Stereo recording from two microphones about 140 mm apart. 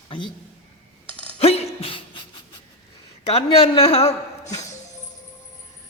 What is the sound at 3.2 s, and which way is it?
A woman's voice, 45° left (ahead or behind).